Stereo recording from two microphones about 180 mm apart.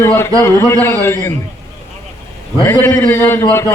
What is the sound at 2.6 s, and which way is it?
Speech, 15° left (ahead or behind).